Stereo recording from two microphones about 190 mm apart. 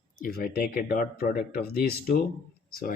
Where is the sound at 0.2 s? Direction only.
50° left (ahead or behind).